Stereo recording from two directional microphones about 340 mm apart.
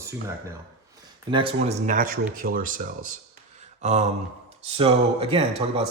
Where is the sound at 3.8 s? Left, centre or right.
Centre.